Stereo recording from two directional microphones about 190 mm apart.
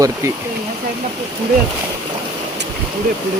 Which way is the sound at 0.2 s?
15° right (ahead or behind).